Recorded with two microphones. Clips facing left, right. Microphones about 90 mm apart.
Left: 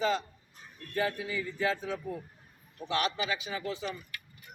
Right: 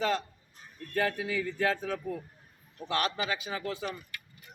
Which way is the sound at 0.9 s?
60° right (ahead or behind).